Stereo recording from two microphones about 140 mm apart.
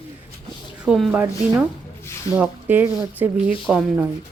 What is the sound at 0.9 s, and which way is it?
Speech, 5° right (ahead or behind).